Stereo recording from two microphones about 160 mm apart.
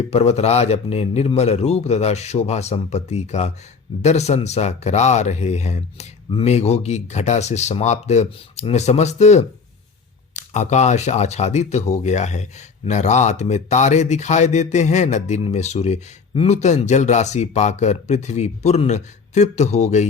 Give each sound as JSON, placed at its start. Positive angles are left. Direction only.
{"t": 0.1, "sound": "a man's voice", "side_deg": 40}